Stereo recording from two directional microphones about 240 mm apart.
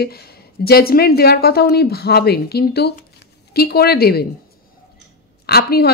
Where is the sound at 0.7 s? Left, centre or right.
Left.